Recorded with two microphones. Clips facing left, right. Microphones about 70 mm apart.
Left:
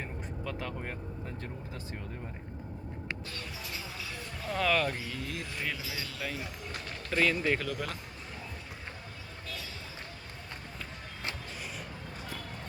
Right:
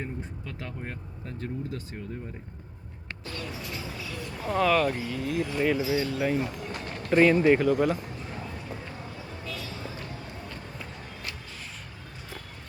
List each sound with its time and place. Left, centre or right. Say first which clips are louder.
4.5 s speech: right 6 dB; centre
5.4 s speech: right 14 dB; centre
5.7 s speech: right 13 dB; right